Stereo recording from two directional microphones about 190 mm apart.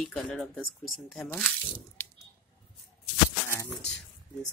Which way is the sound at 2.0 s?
10° left (ahead or behind).